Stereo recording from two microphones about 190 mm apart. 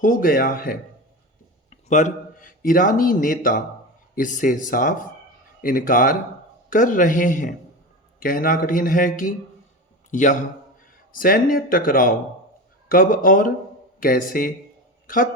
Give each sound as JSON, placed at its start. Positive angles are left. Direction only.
{"t": 0.0, "sound": "a man's voice", "side_deg": 45}